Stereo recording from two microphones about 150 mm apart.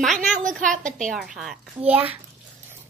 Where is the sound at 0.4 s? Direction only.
60° right (ahead or behind).